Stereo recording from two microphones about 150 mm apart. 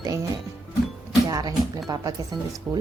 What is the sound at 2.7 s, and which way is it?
Speech, 10° right (ahead or behind).